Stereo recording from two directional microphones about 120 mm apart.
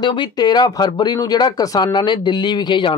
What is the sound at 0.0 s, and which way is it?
Speech, 40° left (ahead or behind).